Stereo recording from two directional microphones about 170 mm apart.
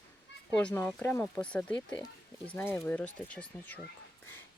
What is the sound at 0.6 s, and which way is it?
Speech, 10° left (ahead or behind).